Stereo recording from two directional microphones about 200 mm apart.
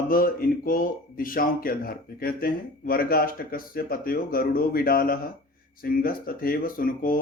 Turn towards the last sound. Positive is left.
turn(degrees=45)  # may be behind; listen again after turning